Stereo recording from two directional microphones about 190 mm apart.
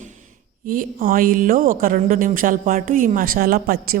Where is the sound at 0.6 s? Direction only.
45° right (ahead or behind).